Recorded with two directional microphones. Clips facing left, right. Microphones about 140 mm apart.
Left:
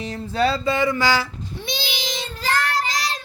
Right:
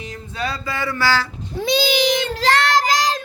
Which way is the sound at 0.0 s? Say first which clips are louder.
Left 6 dB; 35° left (ahead or behind).